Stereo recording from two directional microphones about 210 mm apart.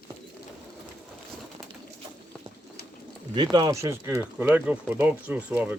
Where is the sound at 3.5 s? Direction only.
15° right (ahead or behind).